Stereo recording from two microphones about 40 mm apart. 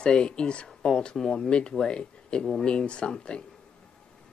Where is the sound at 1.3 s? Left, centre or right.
Left.